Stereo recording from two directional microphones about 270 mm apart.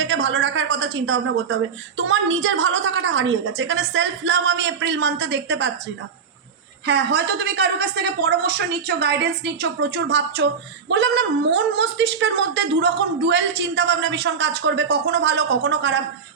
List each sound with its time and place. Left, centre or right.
0.0 s a woman's voice: right
6.8 s a woman's voice: right